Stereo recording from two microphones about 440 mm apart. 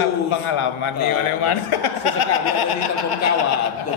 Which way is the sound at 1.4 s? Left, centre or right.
Left.